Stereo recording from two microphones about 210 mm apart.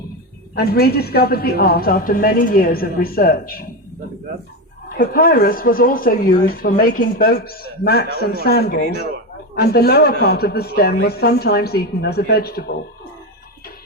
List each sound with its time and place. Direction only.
0.5 s speech: 50° left (ahead or behind)
4.9 s speech: 45° left (ahead or behind)